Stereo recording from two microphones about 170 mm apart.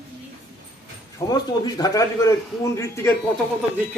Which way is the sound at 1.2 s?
20° left (ahead or behind).